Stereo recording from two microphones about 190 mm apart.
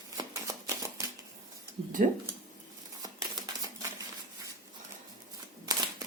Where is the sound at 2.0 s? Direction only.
45° right (ahead or behind).